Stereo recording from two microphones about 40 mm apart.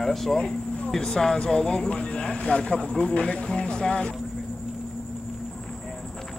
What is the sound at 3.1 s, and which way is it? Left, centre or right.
Speech, left.